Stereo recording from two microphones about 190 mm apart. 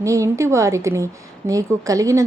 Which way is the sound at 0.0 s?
15° right (ahead or behind).